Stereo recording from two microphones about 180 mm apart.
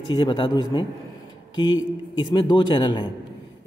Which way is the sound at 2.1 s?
25° left (ahead or behind).